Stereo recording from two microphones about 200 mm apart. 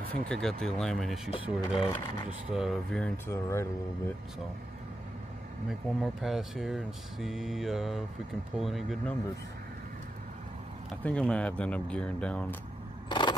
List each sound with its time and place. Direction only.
0.3 s speech: 5° left (ahead or behind)
3.3 s speech: 15° left (ahead or behind)
5.7 s speech: centre (ahead or behind)
11.1 s speech: 5° left (ahead or behind)
13.1 s vehicle: 20° left (ahead or behind)